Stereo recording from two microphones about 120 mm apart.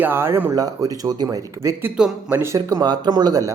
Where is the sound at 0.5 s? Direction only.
30° right (ahead or behind).